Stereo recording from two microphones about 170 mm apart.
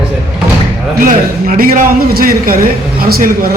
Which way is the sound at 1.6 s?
60° right (ahead or behind).